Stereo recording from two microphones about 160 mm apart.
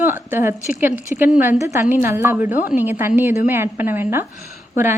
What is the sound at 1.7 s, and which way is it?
A woman's voice, 15° right (ahead or behind).